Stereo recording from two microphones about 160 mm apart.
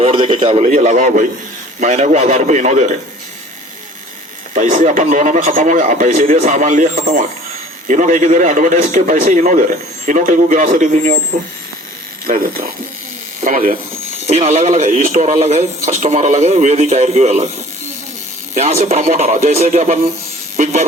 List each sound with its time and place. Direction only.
0.0 s a man's voice: 35° right (ahead or behind)
4.5 s a man's voice: 50° right (ahead or behind)
12.2 s speech: 65° right (ahead or behind)
14.3 s a man's voice: 40° right (ahead or behind)
18.5 s speech: 40° right (ahead or behind)